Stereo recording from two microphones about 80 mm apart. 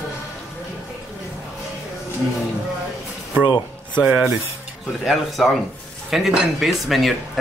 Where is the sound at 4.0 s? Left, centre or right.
Centre.